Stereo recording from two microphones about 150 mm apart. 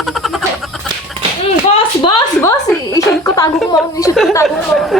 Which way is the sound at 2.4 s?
20° left (ahead or behind).